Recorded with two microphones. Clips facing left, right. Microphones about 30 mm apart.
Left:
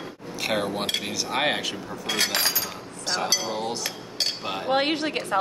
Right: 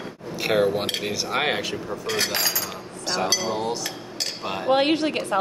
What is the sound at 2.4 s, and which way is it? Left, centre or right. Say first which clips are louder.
Speech: even; centre.